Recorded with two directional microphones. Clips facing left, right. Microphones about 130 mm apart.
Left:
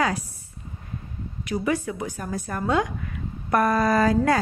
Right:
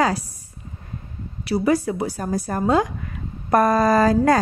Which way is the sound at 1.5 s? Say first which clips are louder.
Right 6 dB; 35° right (ahead or behind).